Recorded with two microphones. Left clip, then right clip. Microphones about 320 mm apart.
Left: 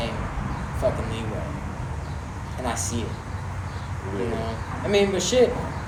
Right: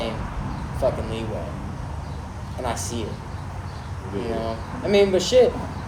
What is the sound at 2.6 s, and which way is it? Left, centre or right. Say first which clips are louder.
Speech: right 1 dB; right.